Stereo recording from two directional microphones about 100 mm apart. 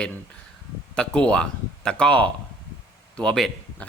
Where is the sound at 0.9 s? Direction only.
10° left (ahead or behind).